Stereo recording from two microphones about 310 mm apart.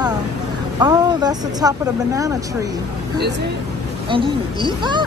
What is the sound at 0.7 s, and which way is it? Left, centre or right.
Speech, centre.